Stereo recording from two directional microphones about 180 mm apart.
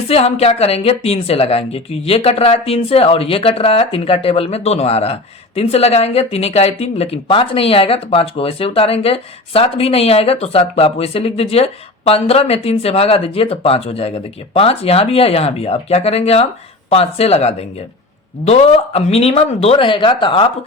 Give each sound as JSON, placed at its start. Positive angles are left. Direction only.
{"t": 0.1, "sound": "speech", "side_deg": 35}